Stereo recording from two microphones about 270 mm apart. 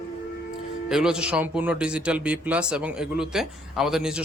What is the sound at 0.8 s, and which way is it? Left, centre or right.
Speech, centre.